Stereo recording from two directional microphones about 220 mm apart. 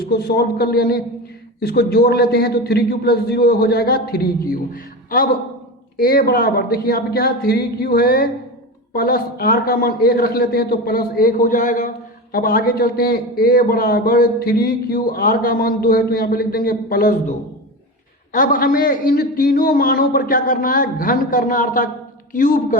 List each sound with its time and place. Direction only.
0.0 s a man's voice: 45° left (ahead or behind)
18.3 s a man's voice: 40° left (ahead or behind)